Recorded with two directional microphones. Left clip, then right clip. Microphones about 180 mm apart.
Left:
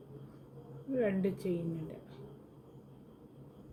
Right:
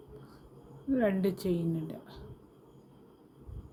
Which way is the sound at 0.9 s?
70° right (ahead or behind).